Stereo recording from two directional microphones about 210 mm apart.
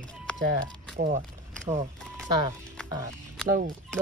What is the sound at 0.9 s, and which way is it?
Speech, 35° right (ahead or behind).